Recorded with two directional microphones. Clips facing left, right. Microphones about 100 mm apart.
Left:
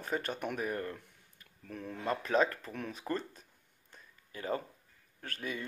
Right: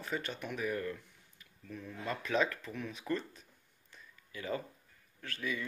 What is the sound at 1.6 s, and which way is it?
Speech, 65° left (ahead or behind).